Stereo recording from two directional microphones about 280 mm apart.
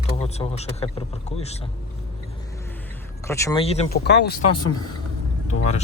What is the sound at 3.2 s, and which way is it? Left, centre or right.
Speech, centre.